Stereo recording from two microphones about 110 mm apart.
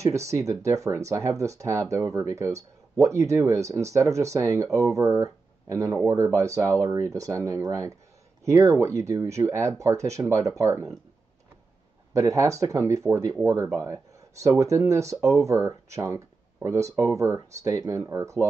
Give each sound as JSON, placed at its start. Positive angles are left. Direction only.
{"t": 0.3, "sound": "speech", "side_deg": -30}
{"t": 12.1, "sound": "speech", "side_deg": -30}
{"t": 13.7, "sound": "a sound", "side_deg": -30}
{"t": 14.6, "sound": "speech", "side_deg": -30}